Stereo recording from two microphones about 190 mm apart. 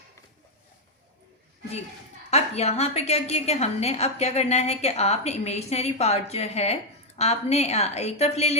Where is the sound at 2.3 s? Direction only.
35° left (ahead or behind).